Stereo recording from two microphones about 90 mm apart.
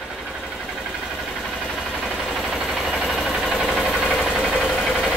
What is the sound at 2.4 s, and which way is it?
Vehicle, 5° right (ahead or behind).